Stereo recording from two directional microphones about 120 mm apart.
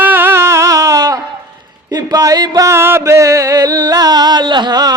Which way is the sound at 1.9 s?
35° right (ahead or behind).